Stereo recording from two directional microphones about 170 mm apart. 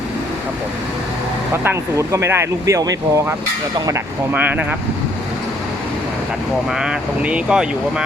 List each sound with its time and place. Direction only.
1.6 s speech: 15° right (ahead or behind)
4.4 s speech: 10° right (ahead or behind)
6.7 s speech: 5° right (ahead or behind)